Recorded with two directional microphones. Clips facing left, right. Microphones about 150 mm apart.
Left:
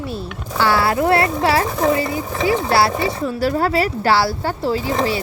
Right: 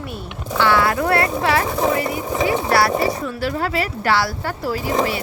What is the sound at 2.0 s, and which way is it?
Speech, 20° right (ahead or behind).